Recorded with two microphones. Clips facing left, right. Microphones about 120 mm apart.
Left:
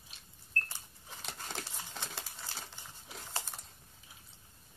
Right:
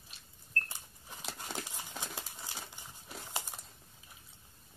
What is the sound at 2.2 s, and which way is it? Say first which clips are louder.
Crumpling: right 1 dB; 15° right (ahead or behind).